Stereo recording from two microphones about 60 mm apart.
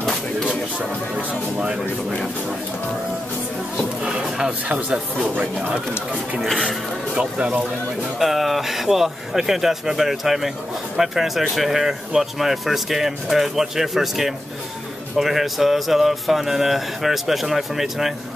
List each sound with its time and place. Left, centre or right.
0.7 s speech: centre
4.5 s speech: right
7.2 s speech: centre
8.2 s speech: centre